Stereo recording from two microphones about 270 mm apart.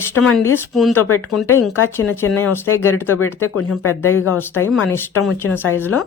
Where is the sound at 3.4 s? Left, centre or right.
Left.